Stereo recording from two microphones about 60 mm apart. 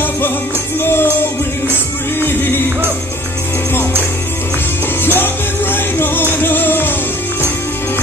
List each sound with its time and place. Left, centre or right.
0.7 s music: left
5.0 s music: left